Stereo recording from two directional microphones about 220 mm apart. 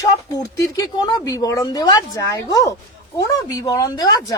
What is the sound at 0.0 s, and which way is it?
Speech, 15° left (ahead or behind).